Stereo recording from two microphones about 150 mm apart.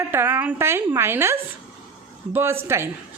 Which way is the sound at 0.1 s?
15° right (ahead or behind).